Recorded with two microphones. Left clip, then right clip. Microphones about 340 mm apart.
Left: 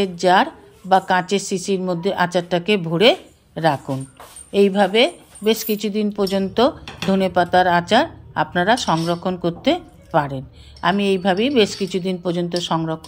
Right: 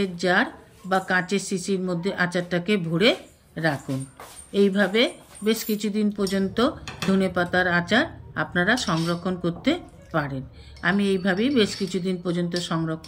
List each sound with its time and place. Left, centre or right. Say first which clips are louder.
0.0 s speech: left 7 dB; centre